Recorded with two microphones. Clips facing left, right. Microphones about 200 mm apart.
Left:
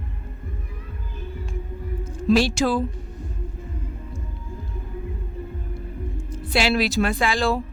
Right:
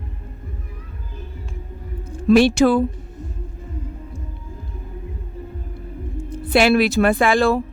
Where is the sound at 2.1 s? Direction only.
60° right (ahead or behind).